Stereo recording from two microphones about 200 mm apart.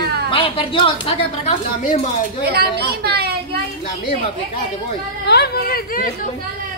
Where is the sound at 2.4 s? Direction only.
50° right (ahead or behind).